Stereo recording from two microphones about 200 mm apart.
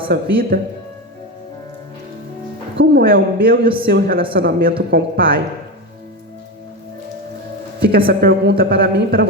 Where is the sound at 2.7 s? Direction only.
50° right (ahead or behind).